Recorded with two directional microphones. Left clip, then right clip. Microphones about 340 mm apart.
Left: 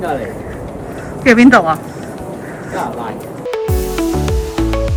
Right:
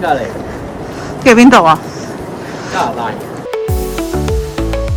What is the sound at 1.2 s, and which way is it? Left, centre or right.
Speech, centre.